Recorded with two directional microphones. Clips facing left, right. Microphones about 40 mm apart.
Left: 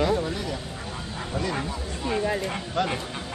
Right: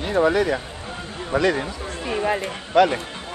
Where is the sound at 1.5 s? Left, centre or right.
Right.